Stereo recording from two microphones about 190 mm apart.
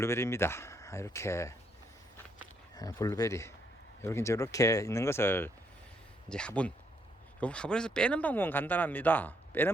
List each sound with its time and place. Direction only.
0.0 s speech: 15° left (ahead or behind)
2.7 s speech: 20° left (ahead or behind)